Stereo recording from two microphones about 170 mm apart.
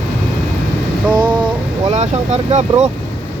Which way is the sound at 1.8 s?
40° right (ahead or behind).